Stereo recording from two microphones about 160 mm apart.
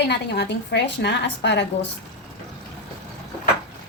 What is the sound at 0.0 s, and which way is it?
A woman's voice, 90° left.